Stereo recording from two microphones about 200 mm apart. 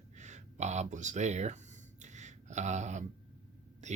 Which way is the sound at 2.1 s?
35° right (ahead or behind).